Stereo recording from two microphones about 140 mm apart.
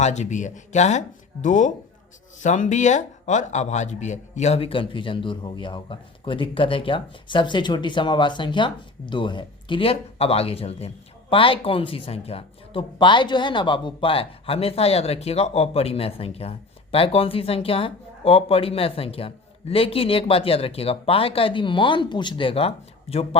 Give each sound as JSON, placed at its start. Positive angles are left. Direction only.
{"t": 0.0, "sound": "a man's voice", "side_deg": 55}